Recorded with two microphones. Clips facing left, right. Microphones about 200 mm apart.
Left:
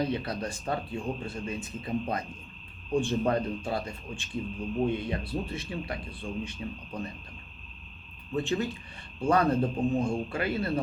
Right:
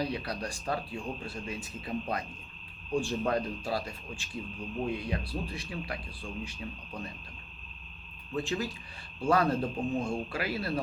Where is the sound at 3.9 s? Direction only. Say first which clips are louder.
Left 4 dB; centre (ahead or behind).